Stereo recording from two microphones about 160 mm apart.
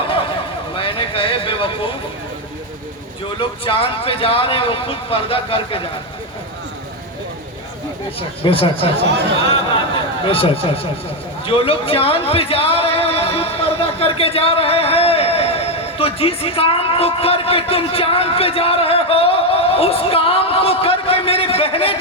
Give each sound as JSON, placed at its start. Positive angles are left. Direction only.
{"t": 0.8, "sound": "a sound", "side_deg": 35}
{"t": 3.3, "sound": "speech", "side_deg": 35}
{"t": 8.4, "sound": "speech", "side_deg": 35}
{"t": 10.2, "sound": "a man's voice", "side_deg": 35}